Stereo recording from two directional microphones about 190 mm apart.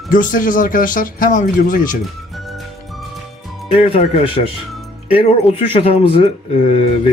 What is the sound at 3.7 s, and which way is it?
Speech, 30° left (ahead or behind).